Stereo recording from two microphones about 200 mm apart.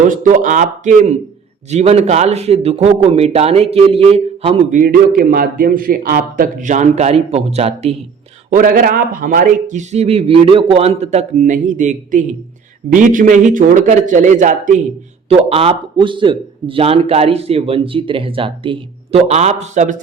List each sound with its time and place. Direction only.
0.1 s a man's voice: 40° right (ahead or behind)
4.8 s a man's voice: 45° right (ahead or behind); by 7.9 s 30° right (ahead or behind)
8.4 s a man's voice: 40° right (ahead or behind)